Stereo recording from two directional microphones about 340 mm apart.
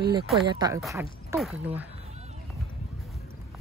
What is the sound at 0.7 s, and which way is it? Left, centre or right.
Speech, centre.